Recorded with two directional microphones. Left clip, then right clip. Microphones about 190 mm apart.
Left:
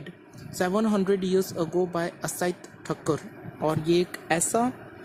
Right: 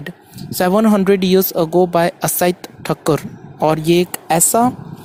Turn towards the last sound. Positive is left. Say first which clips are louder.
# right 11 dB
turn(degrees=-35)  # may be behind; listen again after turning